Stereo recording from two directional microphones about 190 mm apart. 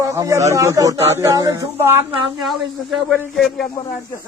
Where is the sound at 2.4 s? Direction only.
Centre (ahead or behind).